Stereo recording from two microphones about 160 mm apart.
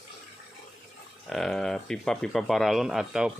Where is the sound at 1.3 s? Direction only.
Centre (ahead or behind).